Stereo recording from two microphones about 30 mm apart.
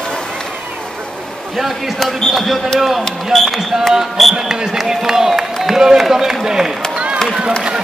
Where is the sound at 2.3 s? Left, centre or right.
Centre.